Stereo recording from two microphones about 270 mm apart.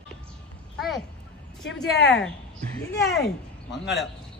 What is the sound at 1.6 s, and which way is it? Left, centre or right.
Speech, left.